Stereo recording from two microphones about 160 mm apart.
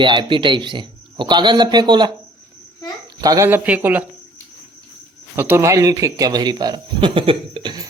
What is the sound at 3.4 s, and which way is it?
Speech, 10° right (ahead or behind).